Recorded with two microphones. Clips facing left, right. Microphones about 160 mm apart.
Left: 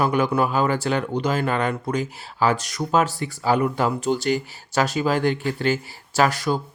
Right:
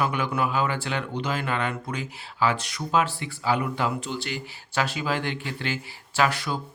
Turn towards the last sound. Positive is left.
turn(degrees=40)  # may be behind; listen again after turning